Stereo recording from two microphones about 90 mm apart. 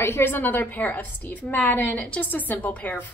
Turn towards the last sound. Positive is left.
turn(degrees=15)  # may be behind; listen again after turning